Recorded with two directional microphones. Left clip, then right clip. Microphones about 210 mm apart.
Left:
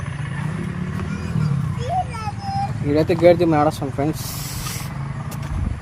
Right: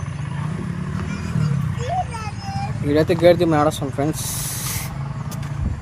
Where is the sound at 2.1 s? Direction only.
15° right (ahead or behind).